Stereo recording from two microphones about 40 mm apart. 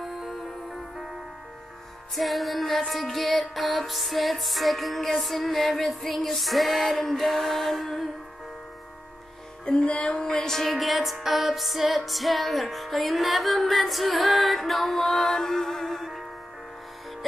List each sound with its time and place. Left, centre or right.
0.0 s music: centre
2.1 s music: centre
9.7 s music: left
10.2 s music: centre
10.6 s music: centre